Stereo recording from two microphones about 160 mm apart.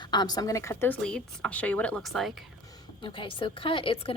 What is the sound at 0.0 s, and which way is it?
Speech, 25° left (ahead or behind).